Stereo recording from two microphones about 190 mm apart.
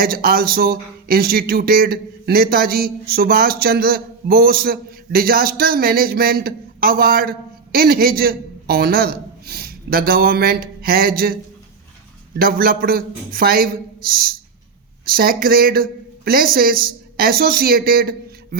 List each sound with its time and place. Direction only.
0.0 s speech: 50° right (ahead or behind)
12.4 s speech: 50° right (ahead or behind)